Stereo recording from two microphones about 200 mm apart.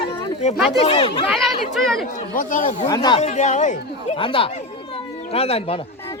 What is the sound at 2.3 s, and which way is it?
Speech, 40° left (ahead or behind).